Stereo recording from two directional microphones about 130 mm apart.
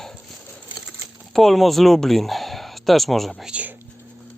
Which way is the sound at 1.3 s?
Centre (ahead or behind).